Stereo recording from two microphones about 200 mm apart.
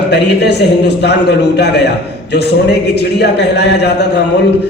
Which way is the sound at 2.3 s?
55° left (ahead or behind).